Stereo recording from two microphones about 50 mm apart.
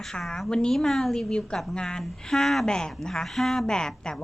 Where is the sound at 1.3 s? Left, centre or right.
Centre.